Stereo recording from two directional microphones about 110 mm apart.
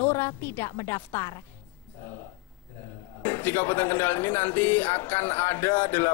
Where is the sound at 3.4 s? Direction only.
20° left (ahead or behind).